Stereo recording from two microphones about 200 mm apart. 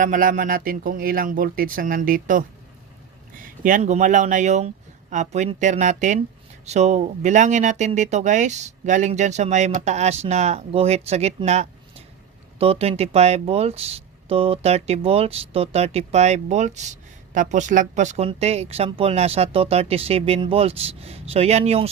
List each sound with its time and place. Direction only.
0.0 s speech: 40° right (ahead or behind)
3.6 s speech: 40° right (ahead or behind)